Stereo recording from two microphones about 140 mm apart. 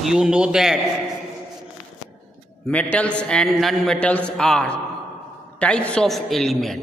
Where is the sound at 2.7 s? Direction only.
10° left (ahead or behind).